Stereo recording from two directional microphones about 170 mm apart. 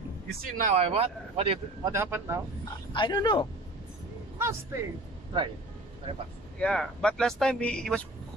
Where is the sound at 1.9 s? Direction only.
15° right (ahead or behind).